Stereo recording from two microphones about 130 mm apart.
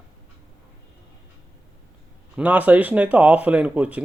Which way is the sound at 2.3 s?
10° right (ahead or behind).